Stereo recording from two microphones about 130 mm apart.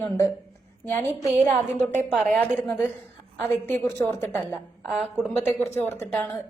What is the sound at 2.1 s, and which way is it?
Speech, centre (ahead or behind).